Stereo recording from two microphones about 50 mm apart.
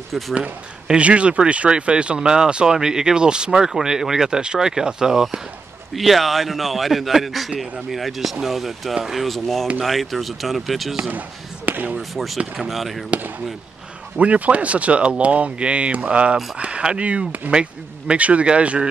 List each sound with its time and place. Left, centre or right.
0.3 s a man's voice: right
5.9 s speech: centre
11.1 s speech: right
12.1 s speech: centre
14.1 s speech: right